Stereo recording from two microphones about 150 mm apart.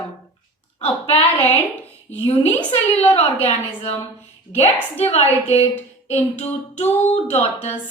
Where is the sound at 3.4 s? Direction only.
45° left (ahead or behind).